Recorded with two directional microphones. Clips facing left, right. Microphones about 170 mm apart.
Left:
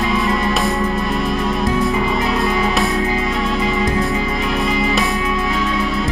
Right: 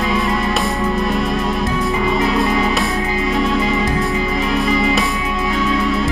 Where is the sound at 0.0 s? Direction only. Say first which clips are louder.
Even; centre (ahead or behind).